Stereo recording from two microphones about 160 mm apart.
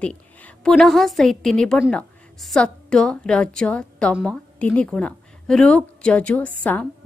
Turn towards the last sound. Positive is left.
turn(degrees=10)  # may be behind; listen again after turning